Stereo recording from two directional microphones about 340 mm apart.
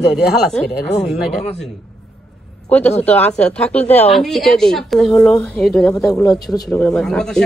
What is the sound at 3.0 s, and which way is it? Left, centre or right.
Speech, centre.